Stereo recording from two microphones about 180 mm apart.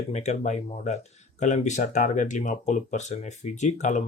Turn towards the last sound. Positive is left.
turn(degrees=40)  # may be behind; listen again after turning